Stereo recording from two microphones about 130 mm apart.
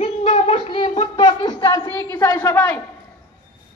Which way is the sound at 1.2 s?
30° left (ahead or behind).